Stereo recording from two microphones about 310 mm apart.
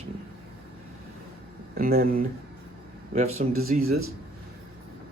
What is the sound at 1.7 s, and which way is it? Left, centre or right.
Speech, right.